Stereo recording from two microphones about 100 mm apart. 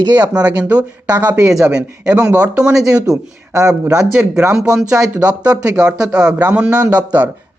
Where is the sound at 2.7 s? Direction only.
35° right (ahead or behind).